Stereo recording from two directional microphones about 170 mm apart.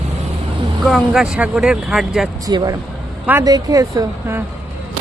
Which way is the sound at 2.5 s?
20° right (ahead or behind).